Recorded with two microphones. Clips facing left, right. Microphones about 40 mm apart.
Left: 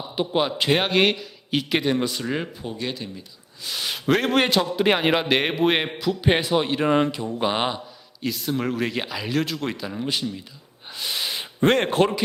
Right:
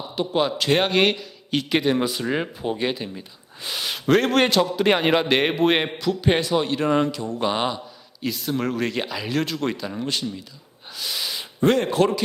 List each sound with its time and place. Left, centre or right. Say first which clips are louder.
0.2 s a man's voice: even; centre
2.6 s speech: right 5 dB; right
3.8 s a man's voice: right 2 dB; centre
8.2 s a man's voice: even; centre
10.8 s gasp: left 1 dB; centre
11.6 s speech: even; left